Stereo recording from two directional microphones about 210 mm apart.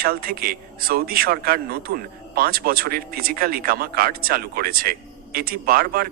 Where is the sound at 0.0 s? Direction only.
45° right (ahead or behind).